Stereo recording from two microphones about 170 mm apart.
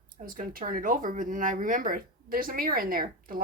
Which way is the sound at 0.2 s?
50° right (ahead or behind).